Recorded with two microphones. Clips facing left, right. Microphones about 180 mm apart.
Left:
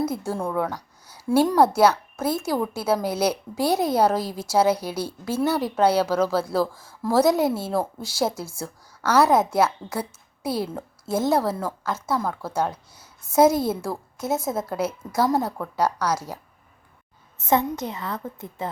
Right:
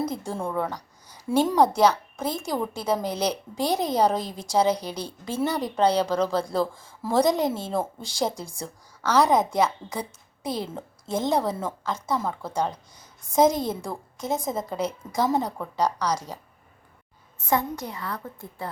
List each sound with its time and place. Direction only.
0.0 s a woman's voice: 5° left (ahead or behind)
17.3 s a woman's voice: 25° left (ahead or behind)